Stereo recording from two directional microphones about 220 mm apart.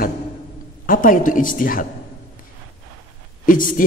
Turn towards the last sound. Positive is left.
turn(degrees=40)  # may be behind; listen again after turning